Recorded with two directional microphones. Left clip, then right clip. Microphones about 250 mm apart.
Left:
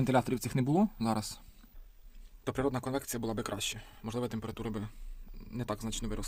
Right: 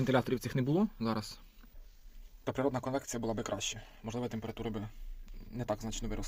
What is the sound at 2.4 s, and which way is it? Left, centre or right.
Speech, centre.